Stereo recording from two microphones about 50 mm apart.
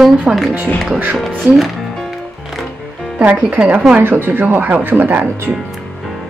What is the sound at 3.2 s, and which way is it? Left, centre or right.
Speech, right.